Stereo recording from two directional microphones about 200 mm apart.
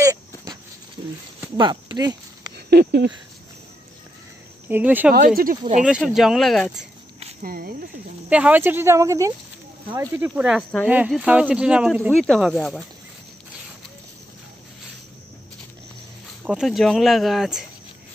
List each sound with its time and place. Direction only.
0.0 s a sound: 15° right (ahead or behind)
1.6 s a sound: 20° right (ahead or behind)
2.5 s a sound: 55° right (ahead or behind)
4.6 s speech: 10° right (ahead or behind)
5.1 s speech: 45° right (ahead or behind)
5.9 s speech: 5° right (ahead or behind)
7.4 s speech: 45° right (ahead or behind)
8.3 s speech: 5° right (ahead or behind)
16.4 s speech: centre (ahead or behind)